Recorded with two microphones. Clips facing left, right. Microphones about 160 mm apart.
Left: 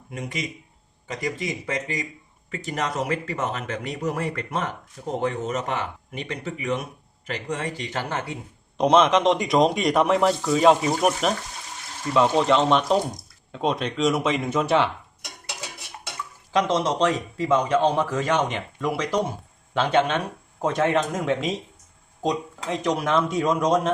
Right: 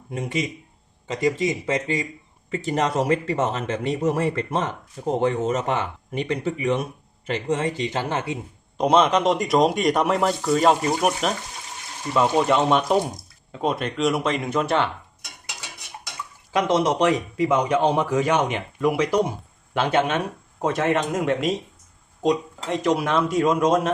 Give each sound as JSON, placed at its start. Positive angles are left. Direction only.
{"t": 0.1, "sound": "speech", "side_deg": -30}
{"t": 8.8, "sound": "a man's voice", "side_deg": 0}
{"t": 16.5, "sound": "a man's voice", "side_deg": -10}